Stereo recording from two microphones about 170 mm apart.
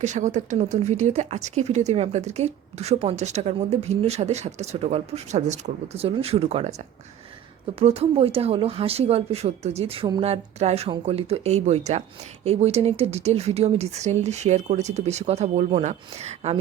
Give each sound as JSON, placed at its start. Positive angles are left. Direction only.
{"t": 0.0, "sound": "speech", "side_deg": -45}
{"t": 7.8, "sound": "speech", "side_deg": -35}